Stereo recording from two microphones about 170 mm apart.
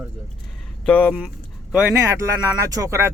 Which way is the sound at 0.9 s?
10° left (ahead or behind).